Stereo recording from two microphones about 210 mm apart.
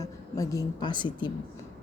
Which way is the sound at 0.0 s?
15° left (ahead or behind).